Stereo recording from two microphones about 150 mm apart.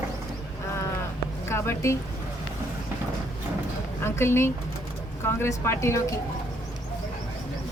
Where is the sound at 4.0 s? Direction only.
15° left (ahead or behind).